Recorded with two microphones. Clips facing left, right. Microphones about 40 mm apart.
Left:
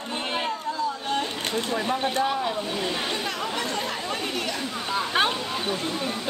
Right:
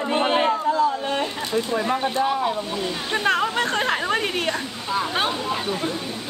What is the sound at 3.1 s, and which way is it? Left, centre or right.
Speech, right.